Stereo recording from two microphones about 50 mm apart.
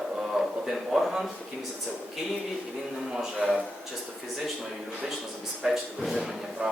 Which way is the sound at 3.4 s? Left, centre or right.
Centre.